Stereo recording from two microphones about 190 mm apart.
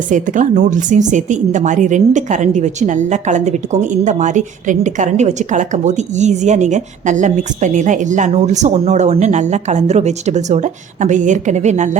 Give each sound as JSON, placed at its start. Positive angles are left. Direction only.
{"t": 0.1, "sound": "a woman's voice", "side_deg": -40}